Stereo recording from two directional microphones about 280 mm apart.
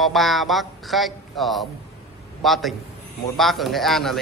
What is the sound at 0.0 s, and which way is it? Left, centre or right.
A man's voice, centre.